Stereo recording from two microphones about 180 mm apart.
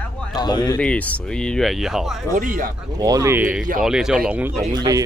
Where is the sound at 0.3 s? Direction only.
25° left (ahead or behind).